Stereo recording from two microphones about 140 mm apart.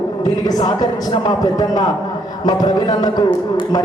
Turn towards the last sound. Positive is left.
turn(degrees=30)  # may be behind; listen again after turning